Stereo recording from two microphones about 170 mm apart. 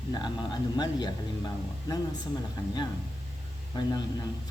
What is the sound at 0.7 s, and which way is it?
Speech, 25° left (ahead or behind).